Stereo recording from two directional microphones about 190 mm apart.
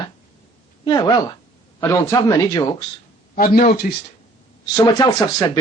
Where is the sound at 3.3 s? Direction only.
50° left (ahead or behind).